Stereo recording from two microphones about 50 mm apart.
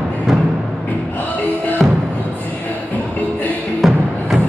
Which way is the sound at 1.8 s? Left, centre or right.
Centre.